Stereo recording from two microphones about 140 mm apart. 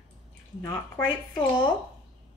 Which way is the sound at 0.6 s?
15° left (ahead or behind).